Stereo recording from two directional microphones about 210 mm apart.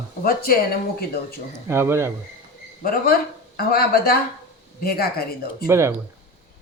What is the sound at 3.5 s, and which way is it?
A woman's voice, 45° left (ahead or behind).